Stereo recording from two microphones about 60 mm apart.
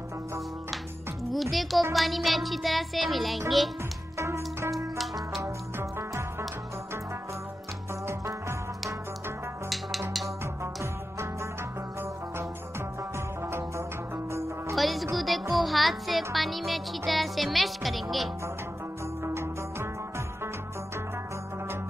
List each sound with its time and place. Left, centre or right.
1.3 s music: centre
4.2 s music: right
4.9 s music: centre
5.8 s music: right
9.7 s music: centre
10.4 s music: right
13.5 s music: right
14.8 s music: centre
19.2 s music: right